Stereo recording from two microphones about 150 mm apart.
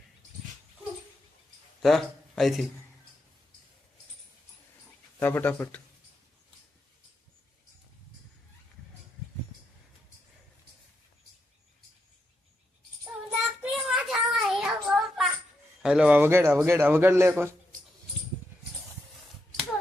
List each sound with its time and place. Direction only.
1.8 s speech: centre (ahead or behind)
5.2 s speech: 15° left (ahead or behind)
13.6 s child singing: 5° right (ahead or behind)
15.8 s a man's voice: 5° right (ahead or behind)